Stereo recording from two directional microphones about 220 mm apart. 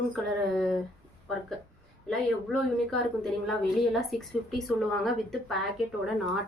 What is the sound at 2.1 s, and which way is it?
A woman's voice, centre (ahead or behind).